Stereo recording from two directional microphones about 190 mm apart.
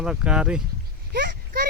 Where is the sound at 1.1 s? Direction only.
55° right (ahead or behind).